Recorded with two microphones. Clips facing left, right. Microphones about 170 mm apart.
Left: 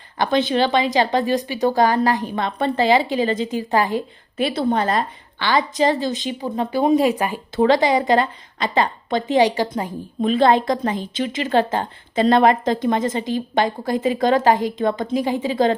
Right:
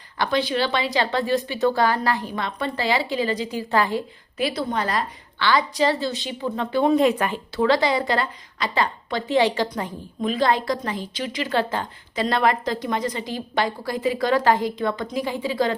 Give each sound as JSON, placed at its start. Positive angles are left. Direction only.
{"t": 0.2, "sound": "a woman's voice", "side_deg": 20}